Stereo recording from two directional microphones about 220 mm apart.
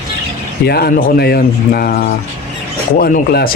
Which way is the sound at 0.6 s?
45° left (ahead or behind).